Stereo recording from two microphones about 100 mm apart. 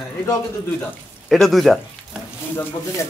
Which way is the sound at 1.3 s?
Centre (ahead or behind).